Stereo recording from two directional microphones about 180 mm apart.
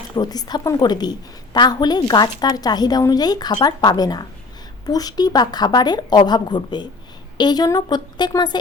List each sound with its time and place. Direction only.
0.2 s a woman's voice: 20° left (ahead or behind)